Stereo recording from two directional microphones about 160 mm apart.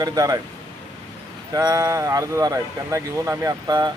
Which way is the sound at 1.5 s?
25° right (ahead or behind).